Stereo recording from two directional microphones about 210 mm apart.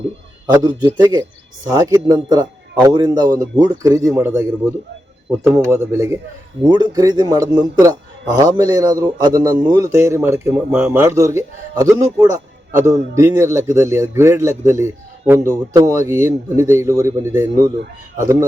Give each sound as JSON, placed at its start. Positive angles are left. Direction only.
{"t": 0.4, "sound": "a man's voice", "side_deg": -20}